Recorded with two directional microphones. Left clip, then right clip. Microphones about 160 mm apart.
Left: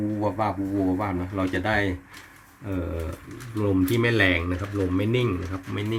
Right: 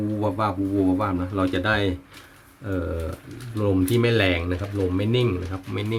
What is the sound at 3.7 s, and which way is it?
Speech, 10° right (ahead or behind).